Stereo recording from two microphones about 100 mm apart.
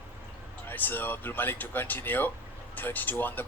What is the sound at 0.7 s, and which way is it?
Speech, 20° left (ahead or behind).